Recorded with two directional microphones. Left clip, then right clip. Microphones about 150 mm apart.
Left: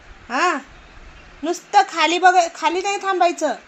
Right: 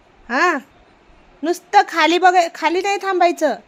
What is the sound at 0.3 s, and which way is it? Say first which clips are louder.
A woman's voice: right 2 dB; 90° right.